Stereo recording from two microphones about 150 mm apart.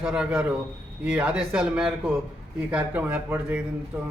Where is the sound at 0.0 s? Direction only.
5° right (ahead or behind).